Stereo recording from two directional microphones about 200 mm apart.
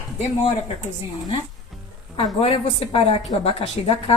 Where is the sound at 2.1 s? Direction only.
25° left (ahead or behind).